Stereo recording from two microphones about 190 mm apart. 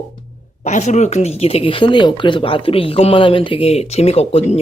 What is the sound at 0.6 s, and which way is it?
Speech, 40° left (ahead or behind).